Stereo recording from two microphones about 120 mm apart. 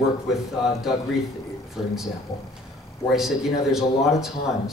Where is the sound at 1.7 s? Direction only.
5° right (ahead or behind).